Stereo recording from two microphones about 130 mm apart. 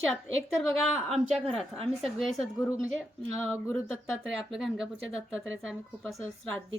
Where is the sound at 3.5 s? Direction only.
20° left (ahead or behind).